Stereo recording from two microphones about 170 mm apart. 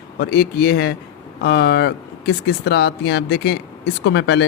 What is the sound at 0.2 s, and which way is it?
A man's voice, 70° left (ahead or behind).